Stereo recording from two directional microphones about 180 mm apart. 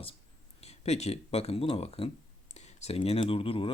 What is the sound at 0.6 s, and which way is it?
Speech, 35° left (ahead or behind).